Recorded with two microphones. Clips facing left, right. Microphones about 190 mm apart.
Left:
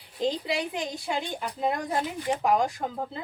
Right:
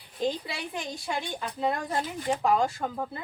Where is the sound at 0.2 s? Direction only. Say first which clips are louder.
Left 3 dB; 20° left (ahead or behind).